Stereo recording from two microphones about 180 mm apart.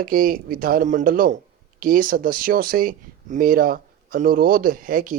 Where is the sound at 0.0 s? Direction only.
50° right (ahead or behind).